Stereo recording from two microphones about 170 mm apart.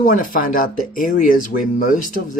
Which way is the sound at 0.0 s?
50° left (ahead or behind).